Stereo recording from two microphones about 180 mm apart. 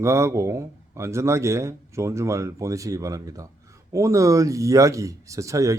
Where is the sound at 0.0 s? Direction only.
15° right (ahead or behind).